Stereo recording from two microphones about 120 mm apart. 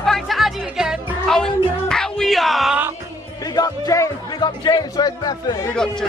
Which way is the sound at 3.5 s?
30° left (ahead or behind).